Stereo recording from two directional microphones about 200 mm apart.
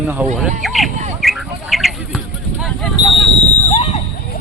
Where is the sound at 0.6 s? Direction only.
Centre (ahead or behind).